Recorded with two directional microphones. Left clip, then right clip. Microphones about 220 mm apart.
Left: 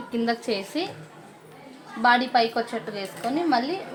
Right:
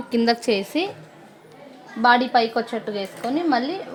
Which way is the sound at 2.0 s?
40° right (ahead or behind).